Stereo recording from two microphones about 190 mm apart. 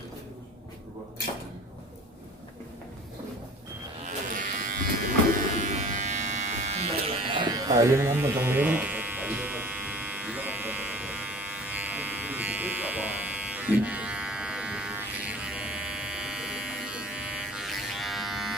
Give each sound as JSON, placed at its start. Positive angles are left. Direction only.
{"t": 4.0, "sound": "livestock", "side_deg": -45}
{"t": 5.5, "sound": "electric shaver", "side_deg": -40}
{"t": 7.3, "sound": "electric shaver", "side_deg": -25}